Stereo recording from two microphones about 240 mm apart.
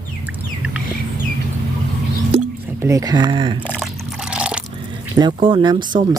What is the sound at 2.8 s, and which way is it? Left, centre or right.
Speech, centre.